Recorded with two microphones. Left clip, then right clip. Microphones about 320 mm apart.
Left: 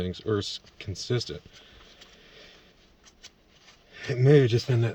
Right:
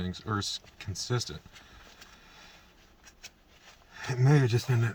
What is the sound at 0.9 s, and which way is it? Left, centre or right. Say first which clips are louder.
Speech: left 3 dB; centre.